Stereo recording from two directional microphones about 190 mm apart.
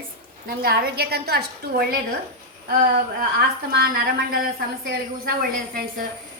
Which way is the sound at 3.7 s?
55° right (ahead or behind).